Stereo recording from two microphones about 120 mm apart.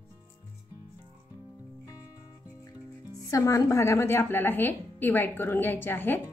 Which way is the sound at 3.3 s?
30° left (ahead or behind).